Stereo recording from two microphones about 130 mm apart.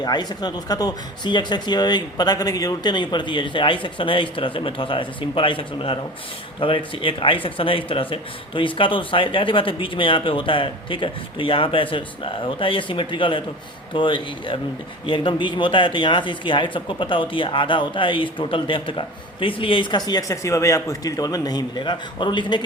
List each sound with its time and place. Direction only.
0.0 s speech: 35° left (ahead or behind)
20.1 s speech: 30° left (ahead or behind)